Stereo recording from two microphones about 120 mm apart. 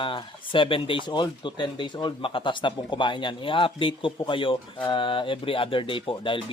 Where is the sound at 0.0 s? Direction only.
45° left (ahead or behind).